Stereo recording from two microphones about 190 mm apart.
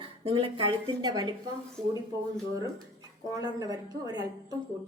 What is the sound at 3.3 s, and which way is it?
Speech, 20° right (ahead or behind).